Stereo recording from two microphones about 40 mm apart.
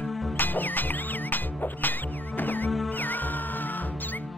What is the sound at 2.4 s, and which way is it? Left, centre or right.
Music, left.